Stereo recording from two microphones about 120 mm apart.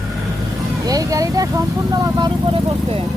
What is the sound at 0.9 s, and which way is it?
Speech, 30° right (ahead or behind).